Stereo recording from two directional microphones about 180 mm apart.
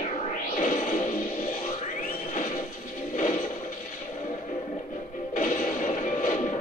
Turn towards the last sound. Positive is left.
turn(degrees=40)  # may be behind; listen again after turning